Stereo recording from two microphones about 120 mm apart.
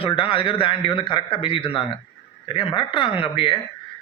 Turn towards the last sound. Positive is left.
turn(degrees=50)  # may be behind; listen again after turning